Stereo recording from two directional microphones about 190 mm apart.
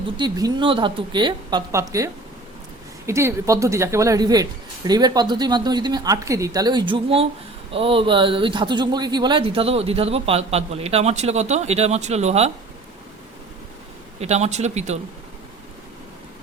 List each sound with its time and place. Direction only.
0.2 s speech: 20° right (ahead or behind)
3.1 s speech: 15° right (ahead or behind); by 12.5 s 35° right (ahead or behind)
14.2 s speech: 35° right (ahead or behind)